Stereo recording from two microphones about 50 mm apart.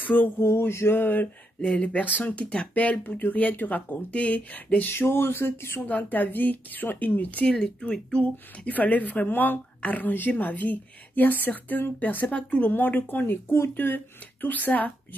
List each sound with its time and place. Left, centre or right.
0.4 s mantra: left
0.9 s speech: left
1.6 s speech: left
4.9 s speech: left
5.9 s speech: left
7.4 s speech: centre; by 14.9 s left